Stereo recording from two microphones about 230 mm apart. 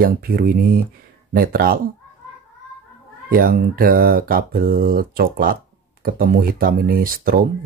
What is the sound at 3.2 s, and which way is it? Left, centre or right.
Speech, right.